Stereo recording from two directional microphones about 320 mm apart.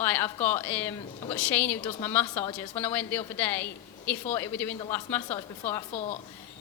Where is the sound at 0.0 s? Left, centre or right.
Centre.